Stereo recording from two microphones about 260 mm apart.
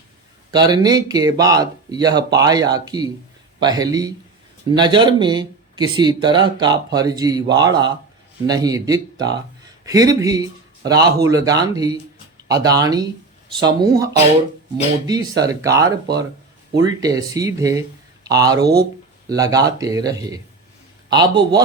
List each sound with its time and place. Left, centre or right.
0.5 s speech: centre